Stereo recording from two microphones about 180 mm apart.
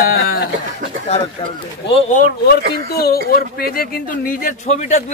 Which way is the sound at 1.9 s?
45° left (ahead or behind).